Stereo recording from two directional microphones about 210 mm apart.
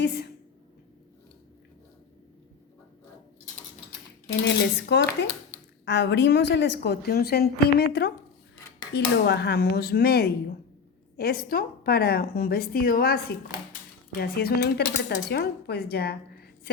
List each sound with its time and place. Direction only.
0.0 s a woman's voice: 50° left (ahead or behind)
4.4 s a woman's voice: 50° left (ahead or behind)
14.2 s a woman's voice: 45° left (ahead or behind)